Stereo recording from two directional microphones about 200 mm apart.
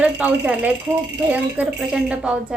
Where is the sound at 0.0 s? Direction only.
5° right (ahead or behind).